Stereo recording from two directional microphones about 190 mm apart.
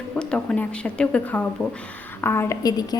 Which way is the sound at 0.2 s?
5° left (ahead or behind).